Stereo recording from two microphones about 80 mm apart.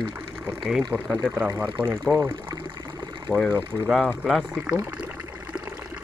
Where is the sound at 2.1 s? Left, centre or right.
Right.